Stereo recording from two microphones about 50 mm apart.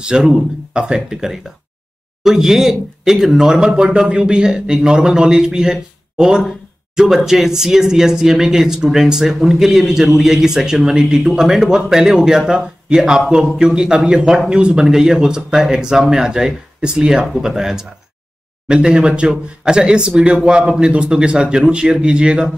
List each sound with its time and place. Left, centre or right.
0.0 s speech: centre